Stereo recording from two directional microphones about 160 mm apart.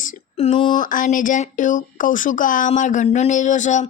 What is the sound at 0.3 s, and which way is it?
Speech, 35° left (ahead or behind).